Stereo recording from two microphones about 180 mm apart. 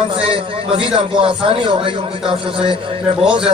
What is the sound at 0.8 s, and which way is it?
A man's voice, 30° right (ahead or behind).